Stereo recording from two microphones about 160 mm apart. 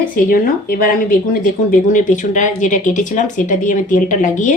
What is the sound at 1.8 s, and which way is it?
Speech, 55° left (ahead or behind).